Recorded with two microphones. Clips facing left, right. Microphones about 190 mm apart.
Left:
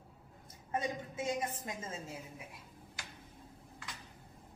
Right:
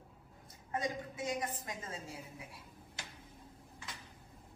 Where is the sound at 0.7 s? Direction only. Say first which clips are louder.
Left 1 dB; 20° left (ahead or behind).